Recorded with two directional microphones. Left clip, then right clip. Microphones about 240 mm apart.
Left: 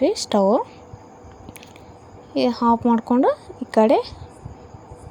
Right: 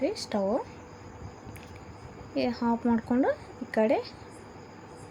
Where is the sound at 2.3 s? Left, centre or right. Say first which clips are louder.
Left 10 dB; left.